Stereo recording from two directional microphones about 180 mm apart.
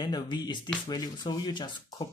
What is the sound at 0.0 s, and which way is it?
Speech, 25° left (ahead or behind).